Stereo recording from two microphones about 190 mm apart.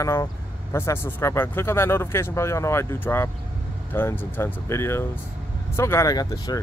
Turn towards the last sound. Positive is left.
turn(degrees=20)  # may be behind; listen again after turning